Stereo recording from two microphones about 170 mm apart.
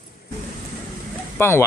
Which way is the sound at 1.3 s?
15° left (ahead or behind).